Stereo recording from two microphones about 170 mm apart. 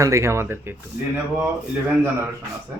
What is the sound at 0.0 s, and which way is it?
Speech, 20° right (ahead or behind).